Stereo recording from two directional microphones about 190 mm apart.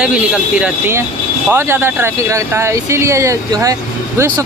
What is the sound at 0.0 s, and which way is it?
Speech, 5° right (ahead or behind).